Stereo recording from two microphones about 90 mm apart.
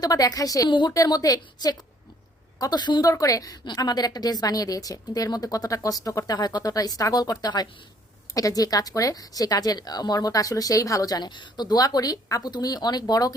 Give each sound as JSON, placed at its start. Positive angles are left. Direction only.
{"t": 0.0, "sound": "a woman's voice", "side_deg": 45}
{"t": 0.7, "sound": "a woman's voice", "side_deg": 60}
{"t": 0.9, "sound": "speech", "side_deg": 45}
{"t": 3.1, "sound": "a woman's voice", "side_deg": 40}